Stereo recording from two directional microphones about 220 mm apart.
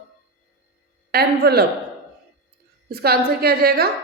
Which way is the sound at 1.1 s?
45° right (ahead or behind).